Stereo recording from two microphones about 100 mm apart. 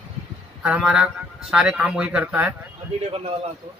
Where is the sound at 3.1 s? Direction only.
75° right (ahead or behind).